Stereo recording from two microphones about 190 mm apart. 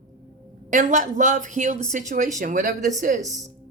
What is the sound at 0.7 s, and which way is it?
A woman's voice, 45° right (ahead or behind).